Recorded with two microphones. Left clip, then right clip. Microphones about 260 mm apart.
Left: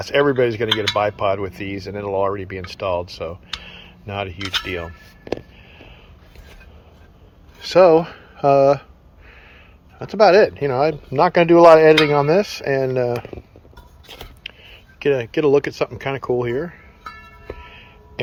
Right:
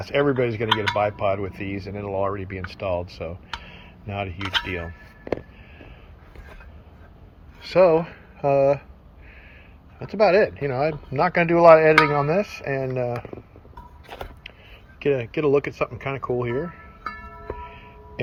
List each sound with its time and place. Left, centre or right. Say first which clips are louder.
0.0 s speech: left 5 dB; centre
7.6 s speech: left 5 dB; centre
10.0 s speech: left 5 dB; centre
14.4 s a sound: left 7 dB; centre
14.9 s speech: left 4 dB; centre
17.5 s music: even; centre